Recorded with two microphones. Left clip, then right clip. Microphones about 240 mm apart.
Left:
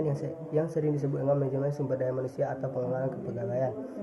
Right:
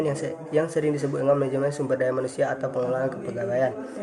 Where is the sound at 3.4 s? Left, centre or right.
Right.